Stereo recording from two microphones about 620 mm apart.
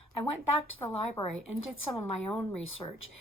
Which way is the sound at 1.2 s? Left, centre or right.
Centre.